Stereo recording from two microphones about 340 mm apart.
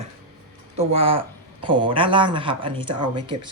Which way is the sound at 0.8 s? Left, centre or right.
Centre.